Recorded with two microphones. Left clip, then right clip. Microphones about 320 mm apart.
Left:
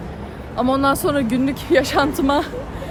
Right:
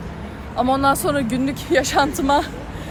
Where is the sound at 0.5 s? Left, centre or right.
Centre.